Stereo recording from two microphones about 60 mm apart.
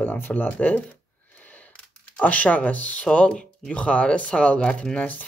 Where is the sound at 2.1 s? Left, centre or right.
Left.